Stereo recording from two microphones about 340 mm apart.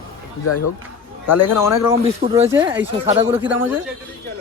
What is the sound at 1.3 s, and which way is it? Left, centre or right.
Speech, left.